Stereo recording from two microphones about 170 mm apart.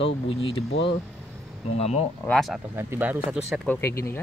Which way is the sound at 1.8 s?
40° left (ahead or behind).